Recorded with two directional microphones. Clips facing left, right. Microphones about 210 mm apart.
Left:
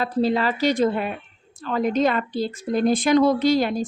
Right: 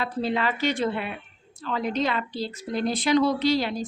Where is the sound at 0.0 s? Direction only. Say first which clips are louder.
Left 5 dB; 35° left (ahead or behind).